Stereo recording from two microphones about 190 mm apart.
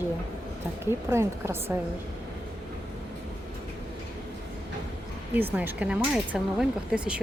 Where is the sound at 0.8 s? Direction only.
15° right (ahead or behind).